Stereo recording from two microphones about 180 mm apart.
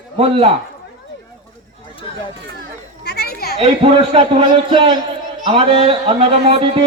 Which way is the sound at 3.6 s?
30° right (ahead or behind).